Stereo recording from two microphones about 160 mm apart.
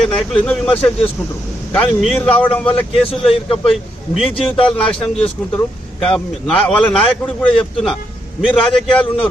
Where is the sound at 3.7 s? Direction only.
Centre (ahead or behind).